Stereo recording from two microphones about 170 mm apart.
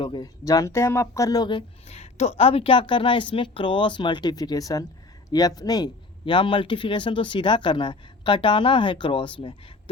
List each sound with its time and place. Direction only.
0.0 s speech: 25° left (ahead or behind)